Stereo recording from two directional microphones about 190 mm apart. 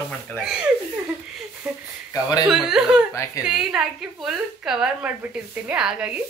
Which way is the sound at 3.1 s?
15° left (ahead or behind).